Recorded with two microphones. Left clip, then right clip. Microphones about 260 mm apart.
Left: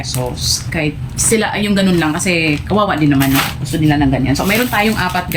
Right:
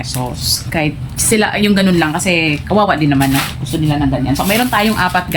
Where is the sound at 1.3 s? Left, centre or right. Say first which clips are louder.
Right 2 dB; centre.